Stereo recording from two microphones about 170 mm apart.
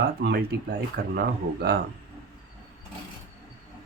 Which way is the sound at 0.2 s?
65° right (ahead or behind).